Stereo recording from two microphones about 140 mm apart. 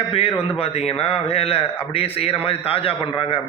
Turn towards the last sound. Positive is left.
turn(degrees=40)  # may be behind; listen again after turning